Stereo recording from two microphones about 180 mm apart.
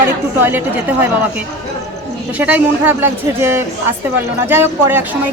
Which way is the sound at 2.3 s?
10° right (ahead or behind).